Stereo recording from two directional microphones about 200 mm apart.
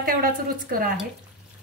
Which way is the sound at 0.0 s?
45° right (ahead or behind).